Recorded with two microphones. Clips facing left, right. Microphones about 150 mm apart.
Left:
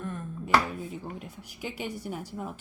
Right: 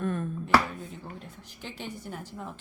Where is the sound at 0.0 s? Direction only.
75° right (ahead or behind).